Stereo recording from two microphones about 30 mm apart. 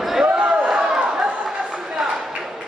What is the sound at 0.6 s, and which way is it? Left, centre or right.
Chatter, right.